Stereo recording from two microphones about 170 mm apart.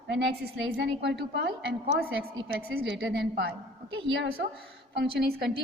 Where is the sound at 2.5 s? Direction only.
65° right (ahead or behind).